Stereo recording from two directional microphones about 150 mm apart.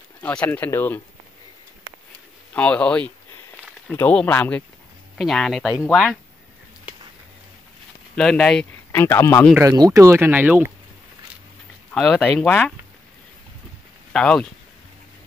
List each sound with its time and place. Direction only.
0.2 s speech: 10° left (ahead or behind)
2.5 s speech: 10° left (ahead or behind)
8.2 s speech: 5° left (ahead or behind)
9.0 s speech: 20° left (ahead or behind)
9.6 s speech: 25° right (ahead or behind)
11.9 s speech: 5° left (ahead or behind)
14.1 s speech: 5° left (ahead or behind)